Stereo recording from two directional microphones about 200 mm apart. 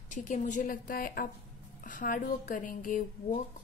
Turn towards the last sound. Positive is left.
turn(degrees=40)  # may be behind; listen again after turning